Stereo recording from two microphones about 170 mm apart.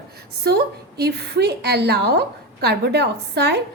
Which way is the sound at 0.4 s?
70° right (ahead or behind).